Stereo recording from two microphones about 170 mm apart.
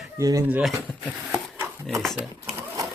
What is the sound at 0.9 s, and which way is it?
Speech, 5° left (ahead or behind).